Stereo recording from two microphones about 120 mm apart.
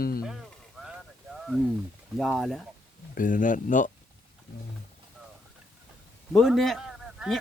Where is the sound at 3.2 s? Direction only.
90° left.